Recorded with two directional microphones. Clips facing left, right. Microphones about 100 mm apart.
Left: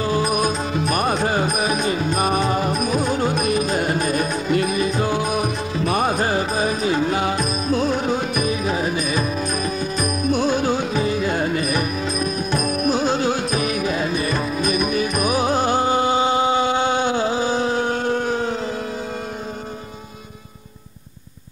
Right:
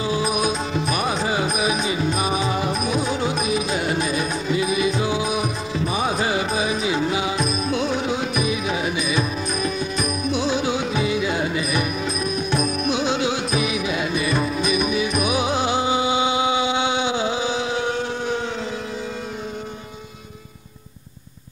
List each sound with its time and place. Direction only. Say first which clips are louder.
0.4 s music: left 1 dB; 45° left (ahead or behind)
2.6 s music: left 2 dB; centre (ahead or behind)
3.1 s music: left 2 dB; 45° left (ahead or behind)
11.8 s music: left 2 dB; centre (ahead or behind)
12.7 s music: left 3 dB; 40° left (ahead or behind)